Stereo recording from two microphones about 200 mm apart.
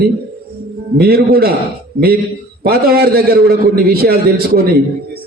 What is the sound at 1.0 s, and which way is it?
Speech, 50° right (ahead or behind).